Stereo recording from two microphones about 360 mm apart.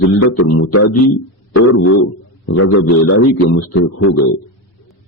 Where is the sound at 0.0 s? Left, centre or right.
Left.